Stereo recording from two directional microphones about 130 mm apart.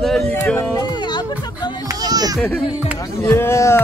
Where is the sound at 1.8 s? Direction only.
30° right (ahead or behind).